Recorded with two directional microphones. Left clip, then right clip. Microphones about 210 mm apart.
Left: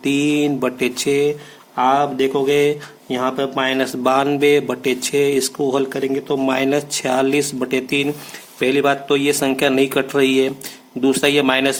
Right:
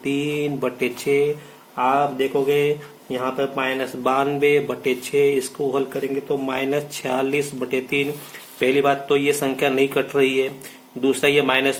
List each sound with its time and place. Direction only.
0.0 s speech: 45° left (ahead or behind)